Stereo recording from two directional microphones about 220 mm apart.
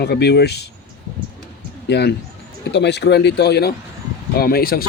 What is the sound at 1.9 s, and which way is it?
Speech, 50° left (ahead or behind).